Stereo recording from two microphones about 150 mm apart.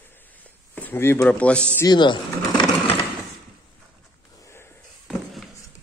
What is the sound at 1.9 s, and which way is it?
Speech, 30° left (ahead or behind).